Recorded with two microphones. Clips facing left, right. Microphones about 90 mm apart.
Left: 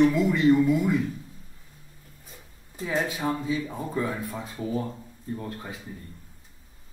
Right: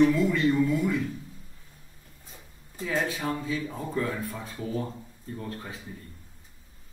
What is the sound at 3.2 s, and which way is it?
Speech, 20° left (ahead or behind).